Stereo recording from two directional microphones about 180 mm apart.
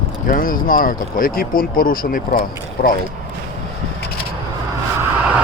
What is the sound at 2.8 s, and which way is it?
Speech, 60° left (ahead or behind).